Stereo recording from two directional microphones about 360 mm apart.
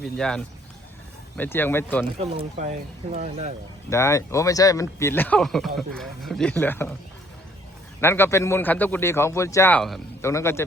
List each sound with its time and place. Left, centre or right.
0.0 s speech: centre
2.1 s speech: centre
3.8 s speech: centre
8.0 s a man's voice: centre